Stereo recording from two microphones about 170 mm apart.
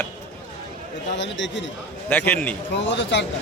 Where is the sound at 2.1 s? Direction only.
10° left (ahead or behind).